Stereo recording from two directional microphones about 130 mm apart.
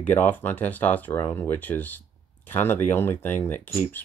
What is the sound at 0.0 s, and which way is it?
Speech, 15° left (ahead or behind).